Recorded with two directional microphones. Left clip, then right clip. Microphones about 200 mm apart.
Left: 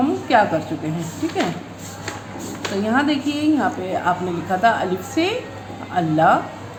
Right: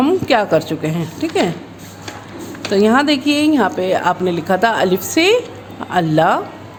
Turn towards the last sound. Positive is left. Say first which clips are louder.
# right 2 dB
turn(degrees=-55)  # may be behind; listen again after turning